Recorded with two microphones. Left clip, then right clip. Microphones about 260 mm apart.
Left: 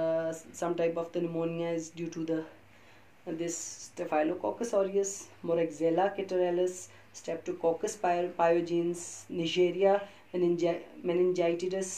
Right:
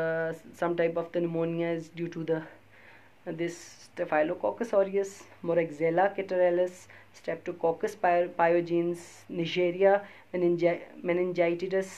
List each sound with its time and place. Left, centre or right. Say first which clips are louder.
0.0 s speech: even; right